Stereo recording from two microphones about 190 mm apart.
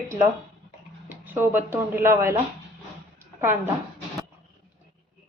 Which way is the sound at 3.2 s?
10° right (ahead or behind).